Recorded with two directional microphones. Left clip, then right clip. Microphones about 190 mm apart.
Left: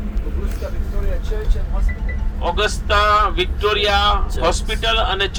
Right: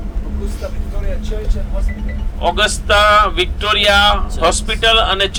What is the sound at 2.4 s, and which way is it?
Speech, 70° right (ahead or behind).